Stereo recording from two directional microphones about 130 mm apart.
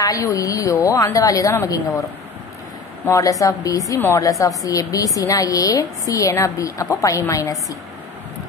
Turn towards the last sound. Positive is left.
turn(degrees=25)  # may be behind; listen again after turning